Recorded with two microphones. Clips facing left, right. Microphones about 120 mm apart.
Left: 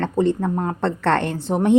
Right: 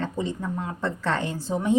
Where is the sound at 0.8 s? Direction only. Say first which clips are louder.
Left 6 dB; 70° left (ahead or behind).